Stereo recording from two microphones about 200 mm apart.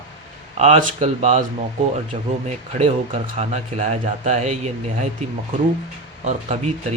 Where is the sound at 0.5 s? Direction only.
35° right (ahead or behind).